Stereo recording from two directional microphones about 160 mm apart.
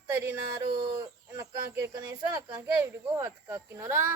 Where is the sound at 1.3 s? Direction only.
15° right (ahead or behind).